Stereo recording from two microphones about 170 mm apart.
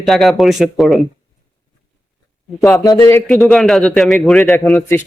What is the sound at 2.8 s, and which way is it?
Speech, 20° left (ahead or behind).